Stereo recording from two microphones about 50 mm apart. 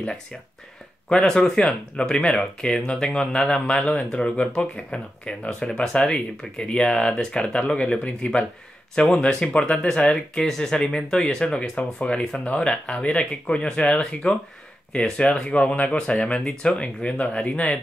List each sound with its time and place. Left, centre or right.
1.0 s speech: centre
15.5 s speech: left